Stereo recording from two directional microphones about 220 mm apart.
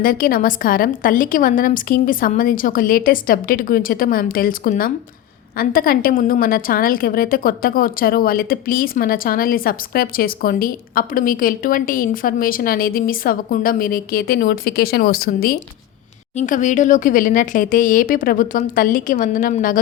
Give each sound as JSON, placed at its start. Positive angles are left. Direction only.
{"t": 0.0, "sound": "a woman's voice", "side_deg": 40}